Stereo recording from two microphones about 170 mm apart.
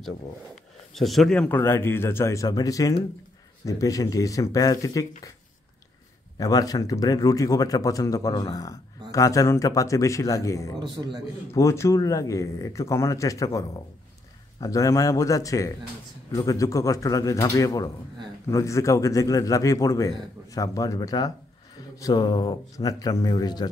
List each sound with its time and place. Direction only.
0.9 s speech: centre (ahead or behind); by 5.3 s 20° left (ahead or behind)
6.3 s speech: 20° left (ahead or behind)
10.8 s a man's voice: 25° right (ahead or behind)
11.5 s speech: 15° left (ahead or behind)